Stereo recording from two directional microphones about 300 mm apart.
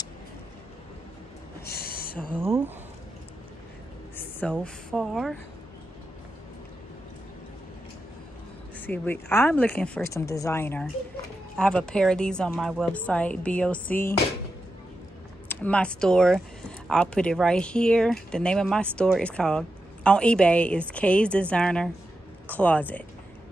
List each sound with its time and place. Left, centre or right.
1.7 s a sound: left
2.3 s speech: centre
4.2 s a woman's voice: centre
8.7 s speech: centre
15.4 s speech: centre